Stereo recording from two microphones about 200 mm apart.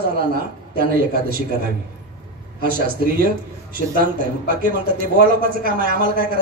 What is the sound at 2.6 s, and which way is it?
Speech, 45° right (ahead or behind).